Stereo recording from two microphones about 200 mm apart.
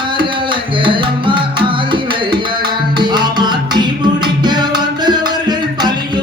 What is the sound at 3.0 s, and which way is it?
Music, 20° right (ahead or behind).